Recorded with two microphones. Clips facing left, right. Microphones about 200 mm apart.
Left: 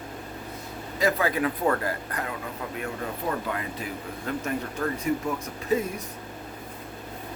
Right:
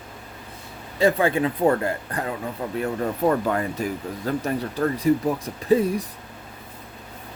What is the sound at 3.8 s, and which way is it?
Speech, 45° right (ahead or behind).